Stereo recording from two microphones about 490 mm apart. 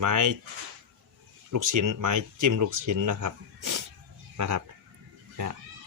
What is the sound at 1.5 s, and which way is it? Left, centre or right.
Speech, right.